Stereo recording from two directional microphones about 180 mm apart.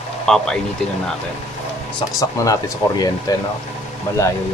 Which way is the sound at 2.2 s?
20° left (ahead or behind).